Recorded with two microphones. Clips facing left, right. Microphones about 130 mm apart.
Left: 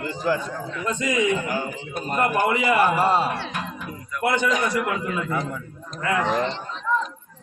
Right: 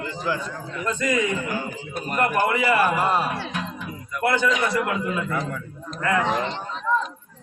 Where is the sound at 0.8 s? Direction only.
15° left (ahead or behind).